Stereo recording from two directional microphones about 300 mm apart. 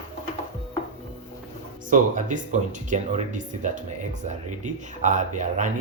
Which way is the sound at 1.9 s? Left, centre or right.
Right.